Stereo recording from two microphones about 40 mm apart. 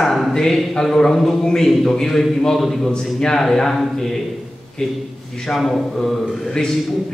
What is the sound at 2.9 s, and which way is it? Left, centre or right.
A man's voice, centre.